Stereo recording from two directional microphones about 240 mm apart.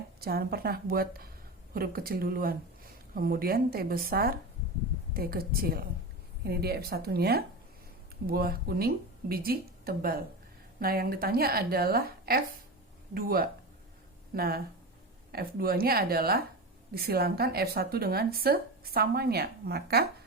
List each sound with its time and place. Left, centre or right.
0.2 s speech: right